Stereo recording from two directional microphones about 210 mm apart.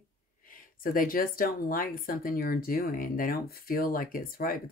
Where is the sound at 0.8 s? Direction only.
45° left (ahead or behind).